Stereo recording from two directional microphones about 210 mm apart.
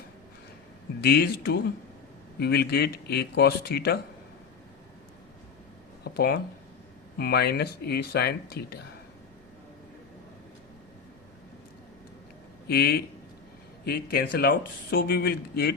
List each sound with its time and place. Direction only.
1.0 s speech: 50° left (ahead or behind)
6.1 s speech: 50° left (ahead or behind)
12.6 s a man's voice: 45° left (ahead or behind)